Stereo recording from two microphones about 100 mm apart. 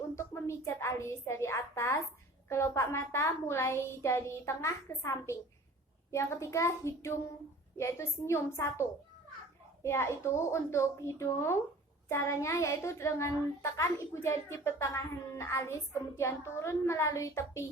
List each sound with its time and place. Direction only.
0.2 s child singing: 25° left (ahead or behind)